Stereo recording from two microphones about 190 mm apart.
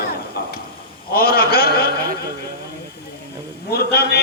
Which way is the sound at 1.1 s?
55° left (ahead or behind).